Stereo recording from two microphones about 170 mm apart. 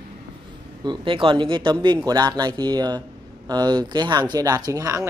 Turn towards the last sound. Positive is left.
turn(degrees=-20)  # may be behind; listen again after turning